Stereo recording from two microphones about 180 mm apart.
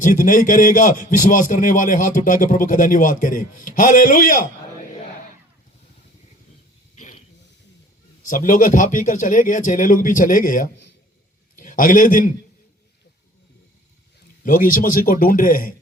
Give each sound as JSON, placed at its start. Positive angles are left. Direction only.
{"t": 0.0, "sound": "speech", "side_deg": 50}
{"t": 6.9, "sound": "a sound", "side_deg": 45}
{"t": 8.3, "sound": "a man's voice", "side_deg": 50}
{"t": 14.4, "sound": "speech", "side_deg": 50}